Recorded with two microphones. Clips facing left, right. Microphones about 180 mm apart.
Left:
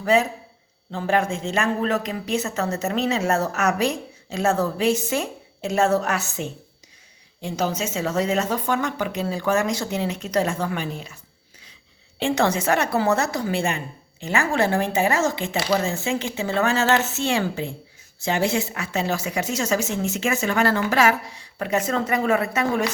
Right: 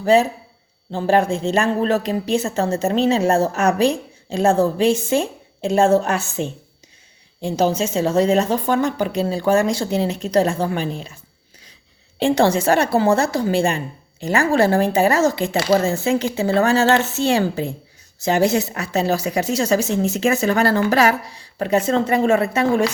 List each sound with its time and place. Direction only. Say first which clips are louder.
0.0 s a woman's voice: right 5 dB; 30° right (ahead or behind)
12.2 s a woman's voice: right 5 dB; 30° right (ahead or behind)